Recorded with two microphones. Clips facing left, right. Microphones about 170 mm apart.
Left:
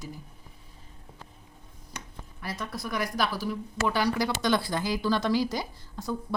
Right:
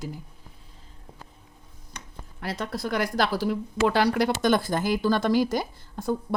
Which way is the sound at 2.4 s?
70° right (ahead or behind).